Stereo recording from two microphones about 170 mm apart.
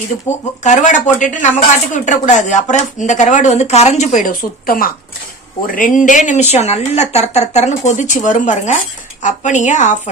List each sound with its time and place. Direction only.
0.6 s speech: 45° left (ahead or behind)